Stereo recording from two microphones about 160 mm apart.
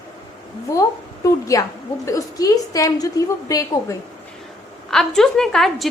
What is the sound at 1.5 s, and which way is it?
A woman's voice, 20° left (ahead or behind).